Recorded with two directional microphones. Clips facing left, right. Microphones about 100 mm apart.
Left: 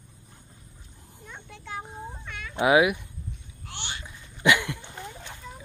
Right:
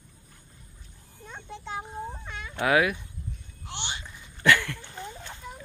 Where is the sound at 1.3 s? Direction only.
25° right (ahead or behind).